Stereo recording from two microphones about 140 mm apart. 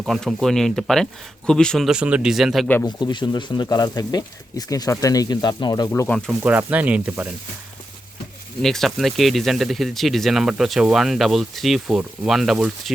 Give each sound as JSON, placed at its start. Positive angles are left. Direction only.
{"t": 0.0, "sound": "speech", "side_deg": 0}
{"t": 2.8, "sound": "speech", "side_deg": 30}
{"t": 5.9, "sound": "speech", "side_deg": 10}
{"t": 6.4, "sound": "speech", "side_deg": -10}
{"t": 8.6, "sound": "speech", "side_deg": 0}